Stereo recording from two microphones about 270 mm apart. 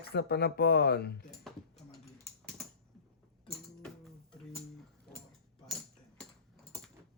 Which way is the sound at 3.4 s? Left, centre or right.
Centre.